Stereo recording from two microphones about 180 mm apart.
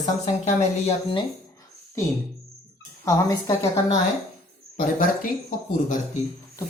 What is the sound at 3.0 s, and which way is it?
Speech, 20° left (ahead or behind).